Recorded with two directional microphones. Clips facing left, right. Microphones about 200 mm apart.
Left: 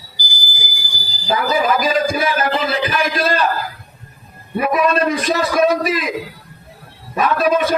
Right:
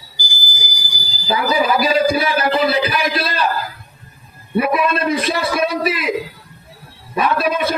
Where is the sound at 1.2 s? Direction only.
45° left (ahead or behind).